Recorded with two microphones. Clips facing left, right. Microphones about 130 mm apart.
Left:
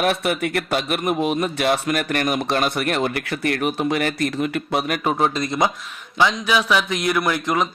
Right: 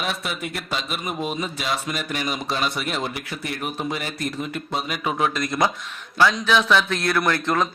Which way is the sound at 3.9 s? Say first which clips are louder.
Left 7 dB; 70° left (ahead or behind).